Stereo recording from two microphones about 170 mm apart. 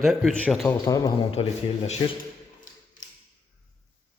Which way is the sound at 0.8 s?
20° left (ahead or behind).